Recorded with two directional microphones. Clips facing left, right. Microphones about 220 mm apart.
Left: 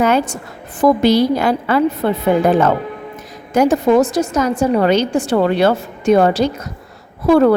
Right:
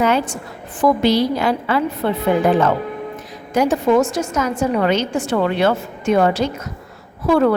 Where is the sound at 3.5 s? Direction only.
45° left (ahead or behind).